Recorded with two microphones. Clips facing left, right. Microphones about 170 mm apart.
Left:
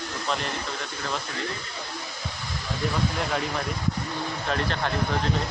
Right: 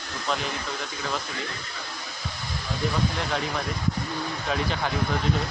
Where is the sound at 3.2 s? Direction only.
Centre (ahead or behind).